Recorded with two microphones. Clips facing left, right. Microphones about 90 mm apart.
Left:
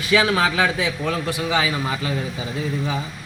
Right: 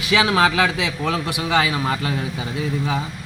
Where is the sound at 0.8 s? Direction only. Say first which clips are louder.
Even; 90° right.